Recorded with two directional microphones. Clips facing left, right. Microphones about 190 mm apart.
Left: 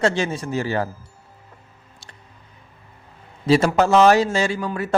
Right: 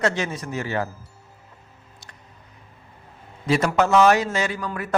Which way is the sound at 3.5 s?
30° left (ahead or behind).